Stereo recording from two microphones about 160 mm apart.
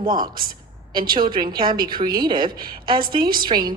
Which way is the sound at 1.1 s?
30° right (ahead or behind).